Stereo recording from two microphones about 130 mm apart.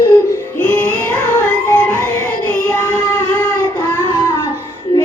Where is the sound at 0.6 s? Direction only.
15° left (ahead or behind).